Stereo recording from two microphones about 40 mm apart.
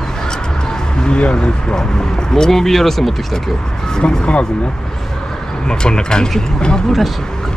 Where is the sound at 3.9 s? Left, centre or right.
Left.